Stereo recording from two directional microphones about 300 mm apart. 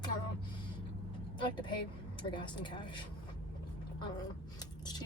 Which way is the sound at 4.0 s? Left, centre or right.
Centre.